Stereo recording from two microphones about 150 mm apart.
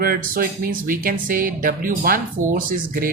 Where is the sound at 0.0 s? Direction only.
75° right (ahead or behind).